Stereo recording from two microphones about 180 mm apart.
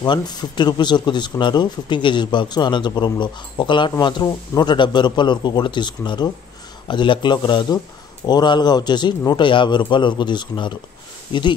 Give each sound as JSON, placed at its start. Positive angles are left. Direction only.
{"t": 0.0, "sound": "speech", "side_deg": 25}